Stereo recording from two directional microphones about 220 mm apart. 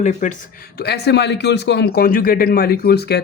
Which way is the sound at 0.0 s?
35° left (ahead or behind).